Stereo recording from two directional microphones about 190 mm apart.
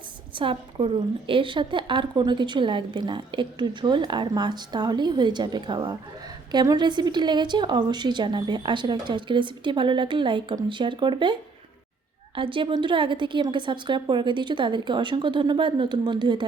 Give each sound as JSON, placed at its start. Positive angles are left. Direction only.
{"t": 0.3, "sound": "a woman's voice", "side_deg": -25}